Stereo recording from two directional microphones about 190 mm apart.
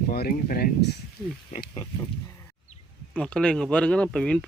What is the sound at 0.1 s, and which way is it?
Speech, 50° left (ahead or behind).